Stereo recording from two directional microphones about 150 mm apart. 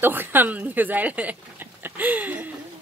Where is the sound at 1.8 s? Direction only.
10° right (ahead or behind).